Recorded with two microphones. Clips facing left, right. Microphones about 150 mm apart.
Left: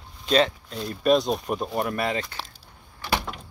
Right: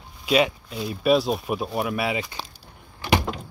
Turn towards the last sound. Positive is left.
turn(degrees=-20)  # may be behind; listen again after turning